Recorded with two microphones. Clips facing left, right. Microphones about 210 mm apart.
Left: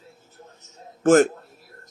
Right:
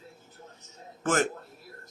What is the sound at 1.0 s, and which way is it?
Speech, 45° left (ahead or behind).